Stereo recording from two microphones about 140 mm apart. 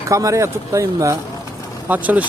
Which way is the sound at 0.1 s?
25° right (ahead or behind).